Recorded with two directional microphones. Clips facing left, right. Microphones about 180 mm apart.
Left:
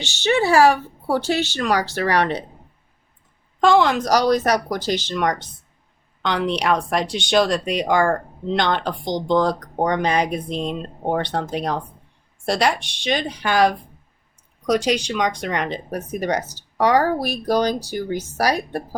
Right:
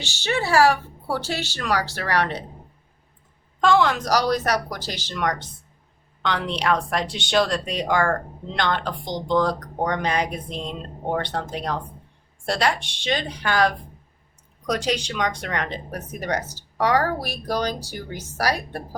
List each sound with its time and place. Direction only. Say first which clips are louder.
0.0 s speech: left 6 dB; 20° left (ahead or behind)
3.6 s speech: left 3 dB; 15° left (ahead or behind)